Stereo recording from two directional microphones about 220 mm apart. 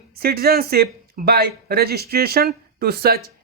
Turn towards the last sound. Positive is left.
turn(degrees=-45)  # may be behind; listen again after turning